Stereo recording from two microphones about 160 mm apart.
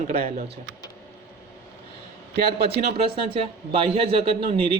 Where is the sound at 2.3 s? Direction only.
90° right.